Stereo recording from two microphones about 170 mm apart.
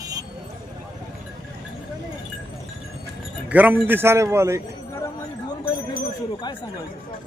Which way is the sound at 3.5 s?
10° right (ahead or behind).